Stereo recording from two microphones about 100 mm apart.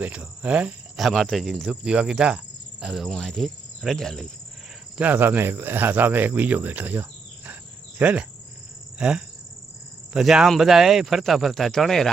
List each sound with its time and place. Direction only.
0.0 s cricket: 15° right (ahead or behind)
0.9 s speech: centre (ahead or behind)
4.9 s speech: 15° right (ahead or behind)
7.9 s cricket: 15° right (ahead or behind)
9.0 s speech: 10° right (ahead or behind)